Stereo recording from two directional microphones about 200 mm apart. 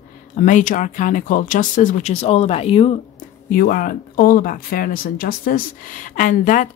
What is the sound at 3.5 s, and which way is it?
Speech, 45° left (ahead or behind).